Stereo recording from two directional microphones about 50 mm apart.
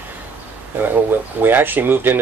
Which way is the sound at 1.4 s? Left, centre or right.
Right.